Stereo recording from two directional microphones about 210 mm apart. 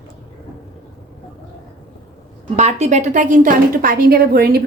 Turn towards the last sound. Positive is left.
turn(degrees=-45)  # may be behind; listen again after turning